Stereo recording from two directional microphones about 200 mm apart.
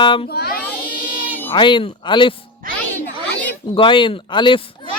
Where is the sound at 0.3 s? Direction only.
50° left (ahead or behind).